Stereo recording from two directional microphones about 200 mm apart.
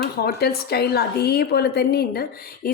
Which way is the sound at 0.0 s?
50° left (ahead or behind).